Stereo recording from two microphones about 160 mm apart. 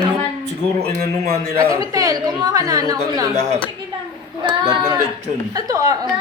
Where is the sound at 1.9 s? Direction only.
20° right (ahead or behind).